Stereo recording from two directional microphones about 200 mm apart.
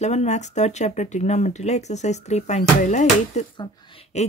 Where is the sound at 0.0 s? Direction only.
35° left (ahead or behind).